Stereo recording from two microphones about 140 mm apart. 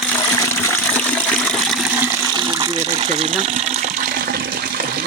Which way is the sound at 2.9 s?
45° right (ahead or behind).